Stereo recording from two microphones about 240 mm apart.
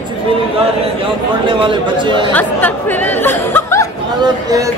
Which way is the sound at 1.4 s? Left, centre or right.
Centre.